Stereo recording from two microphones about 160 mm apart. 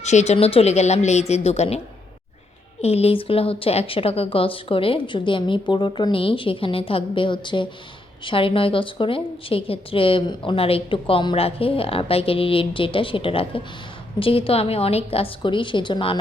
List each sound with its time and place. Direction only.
0.0 s speech: 45° left (ahead or behind)
2.8 s a woman's voice: 40° left (ahead or behind)